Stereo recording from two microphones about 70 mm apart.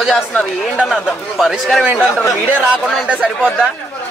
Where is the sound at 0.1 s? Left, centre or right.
Centre.